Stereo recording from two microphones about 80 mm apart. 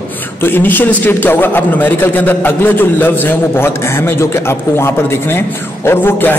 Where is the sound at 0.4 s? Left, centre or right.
Left.